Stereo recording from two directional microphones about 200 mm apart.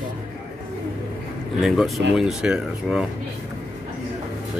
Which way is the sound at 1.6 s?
Centre (ahead or behind).